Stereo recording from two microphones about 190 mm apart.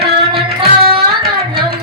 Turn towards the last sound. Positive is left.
turn(degrees=-30)  # may be behind; listen again after turning